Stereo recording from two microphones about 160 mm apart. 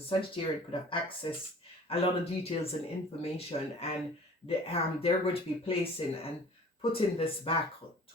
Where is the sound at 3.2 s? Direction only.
40° left (ahead or behind).